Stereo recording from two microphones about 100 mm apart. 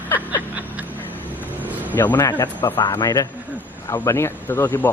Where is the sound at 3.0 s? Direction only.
40° left (ahead or behind).